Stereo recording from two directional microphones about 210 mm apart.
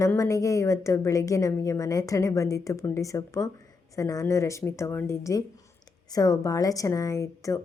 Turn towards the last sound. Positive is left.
turn(degrees=15)  # may be behind; listen again after turning